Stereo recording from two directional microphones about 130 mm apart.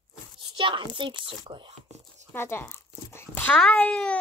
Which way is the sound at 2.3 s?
15° left (ahead or behind).